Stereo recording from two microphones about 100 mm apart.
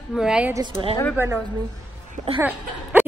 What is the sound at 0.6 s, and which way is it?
Speech, 55° right (ahead or behind).